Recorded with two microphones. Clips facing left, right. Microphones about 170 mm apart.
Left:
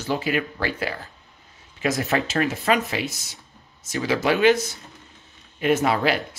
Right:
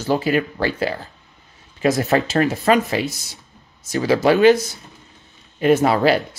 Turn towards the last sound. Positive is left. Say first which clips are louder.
# right 5 dB
turn(degrees=-35)  # may be behind; listen again after turning